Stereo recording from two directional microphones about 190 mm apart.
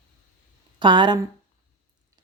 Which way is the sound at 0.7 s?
25° right (ahead or behind).